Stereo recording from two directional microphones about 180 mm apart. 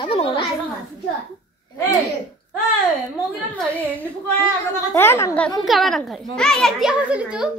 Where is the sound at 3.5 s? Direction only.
10° left (ahead or behind).